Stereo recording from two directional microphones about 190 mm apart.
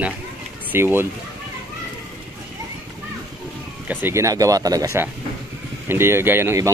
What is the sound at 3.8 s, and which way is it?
Speech, 15° right (ahead or behind).